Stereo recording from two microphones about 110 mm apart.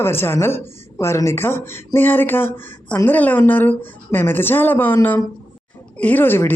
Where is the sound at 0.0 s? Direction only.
20° left (ahead or behind).